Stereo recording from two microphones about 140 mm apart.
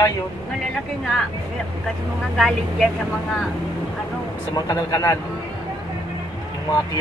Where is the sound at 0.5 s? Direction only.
Centre (ahead or behind).